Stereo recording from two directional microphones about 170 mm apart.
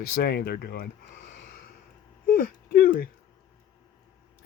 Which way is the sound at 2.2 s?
55° left (ahead or behind).